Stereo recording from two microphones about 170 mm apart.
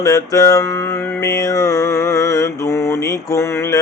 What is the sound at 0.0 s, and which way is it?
Mantra, 20° left (ahead or behind).